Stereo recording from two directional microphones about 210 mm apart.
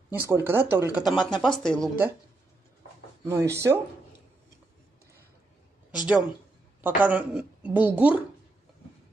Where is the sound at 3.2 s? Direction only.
15° right (ahead or behind).